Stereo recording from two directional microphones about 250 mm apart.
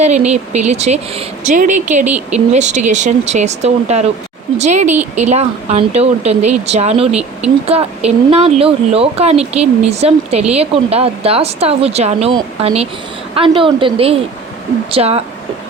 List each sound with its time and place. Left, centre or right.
0.3 s speech: right
7.1 s speech: centre
7.7 s speech: right